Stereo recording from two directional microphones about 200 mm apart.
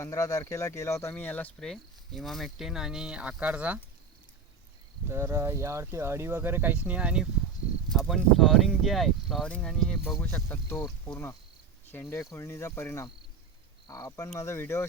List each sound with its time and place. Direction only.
0.0 s speech: 15° left (ahead or behind); by 3.8 s 5° right (ahead or behind)
5.0 s speech: 15° right (ahead or behind); by 14.8 s 15° left (ahead or behind)